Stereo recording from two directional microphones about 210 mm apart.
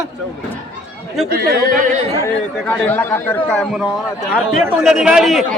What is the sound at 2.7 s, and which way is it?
Speech, 10° left (ahead or behind).